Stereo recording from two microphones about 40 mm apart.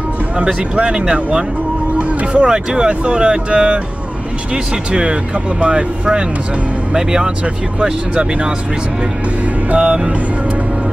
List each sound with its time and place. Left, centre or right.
0.7 s speech: right
2.0 s music: right
2.4 s speech: right
5.6 s speech: right
9.8 s speech: centre